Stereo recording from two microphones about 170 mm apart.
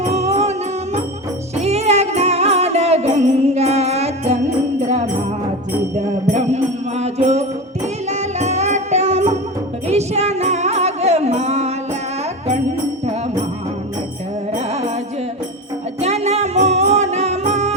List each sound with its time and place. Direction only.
0.0 s music: 40° right (ahead or behind)
1.5 s music: 40° right (ahead or behind)
6.3 s music: 40° right (ahead or behind)
14.7 s music: 40° right (ahead or behind)
16.0 s music: 40° right (ahead or behind)